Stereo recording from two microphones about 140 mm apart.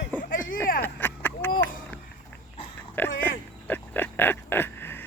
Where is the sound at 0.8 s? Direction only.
15° left (ahead or behind).